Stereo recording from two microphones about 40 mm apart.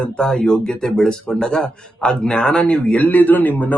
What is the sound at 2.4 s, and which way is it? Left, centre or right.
Speech, left.